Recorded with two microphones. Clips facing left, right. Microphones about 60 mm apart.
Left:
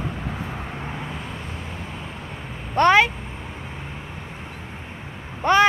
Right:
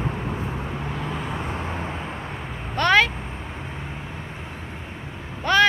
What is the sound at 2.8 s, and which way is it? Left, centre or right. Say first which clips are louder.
Vehicle: left 3 dB; left.